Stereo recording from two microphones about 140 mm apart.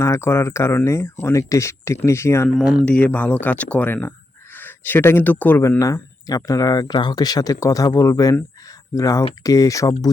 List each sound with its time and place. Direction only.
0.0 s speech: 20° left (ahead or behind)
2.5 s speech: centre (ahead or behind); by 10.1 s 25° left (ahead or behind)